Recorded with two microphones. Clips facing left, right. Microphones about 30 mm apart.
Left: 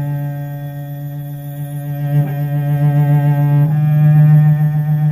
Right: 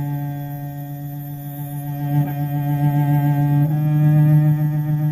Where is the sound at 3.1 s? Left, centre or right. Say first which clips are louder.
Left 3 dB; left.